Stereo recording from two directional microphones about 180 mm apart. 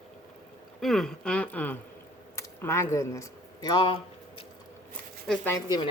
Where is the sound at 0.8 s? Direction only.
Centre (ahead or behind).